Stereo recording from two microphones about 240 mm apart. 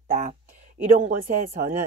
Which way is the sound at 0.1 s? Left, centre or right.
Right.